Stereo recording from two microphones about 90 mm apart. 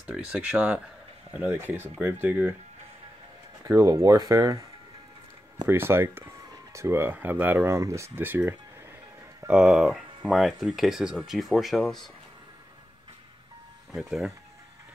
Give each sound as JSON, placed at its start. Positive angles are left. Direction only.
{"t": 0.0, "sound": "speech", "side_deg": -10}
{"t": 3.6, "sound": "speech", "side_deg": -35}
{"t": 5.7, "sound": "speech", "side_deg": -25}
{"t": 7.7, "sound": "speech", "side_deg": -35}
{"t": 9.5, "sound": "speech", "side_deg": -5}
{"t": 13.9, "sound": "speech", "side_deg": -5}